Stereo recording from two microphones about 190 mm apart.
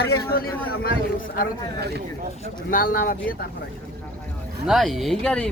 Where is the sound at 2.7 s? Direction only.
50° left (ahead or behind).